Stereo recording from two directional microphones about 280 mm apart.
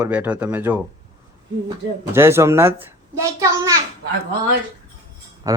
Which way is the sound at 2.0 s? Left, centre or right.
Centre.